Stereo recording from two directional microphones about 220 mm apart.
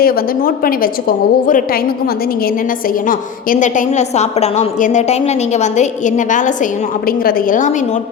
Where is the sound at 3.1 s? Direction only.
35° left (ahead or behind).